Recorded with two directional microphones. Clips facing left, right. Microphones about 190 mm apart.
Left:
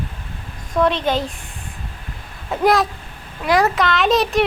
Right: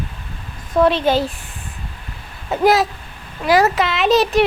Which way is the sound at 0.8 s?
5° right (ahead or behind).